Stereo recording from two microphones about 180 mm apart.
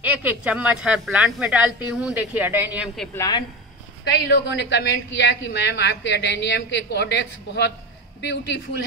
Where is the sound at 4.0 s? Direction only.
70° left (ahead or behind).